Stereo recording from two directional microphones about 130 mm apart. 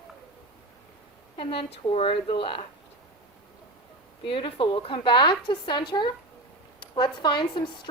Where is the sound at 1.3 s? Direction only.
45° left (ahead or behind).